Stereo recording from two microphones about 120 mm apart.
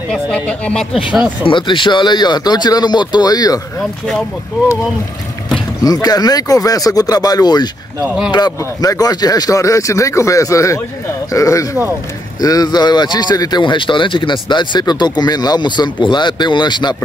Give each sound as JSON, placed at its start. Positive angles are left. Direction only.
{"t": 0.1, "sound": "speech", "side_deg": 10}
{"t": 1.4, "sound": "speech", "side_deg": 45}
{"t": 5.9, "sound": "speech", "side_deg": 30}